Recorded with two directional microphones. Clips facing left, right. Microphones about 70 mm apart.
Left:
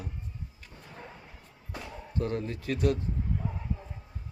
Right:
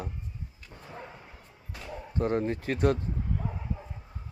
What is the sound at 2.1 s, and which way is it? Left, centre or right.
Speech, right.